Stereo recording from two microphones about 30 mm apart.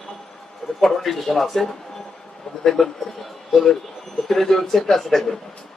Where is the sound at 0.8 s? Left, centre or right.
Centre.